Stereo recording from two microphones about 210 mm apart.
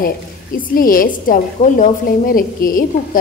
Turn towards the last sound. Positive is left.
turn(degrees=40)  # may be behind; listen again after turning